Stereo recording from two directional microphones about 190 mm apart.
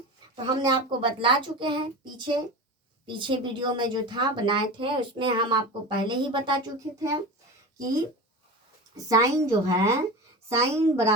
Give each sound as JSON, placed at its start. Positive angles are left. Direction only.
{"t": 0.4, "sound": "speech", "side_deg": -25}
{"t": 9.0, "sound": "a woman's voice", "side_deg": -20}